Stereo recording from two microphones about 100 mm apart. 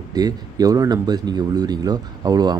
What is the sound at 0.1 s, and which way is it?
Speech, 40° right (ahead or behind).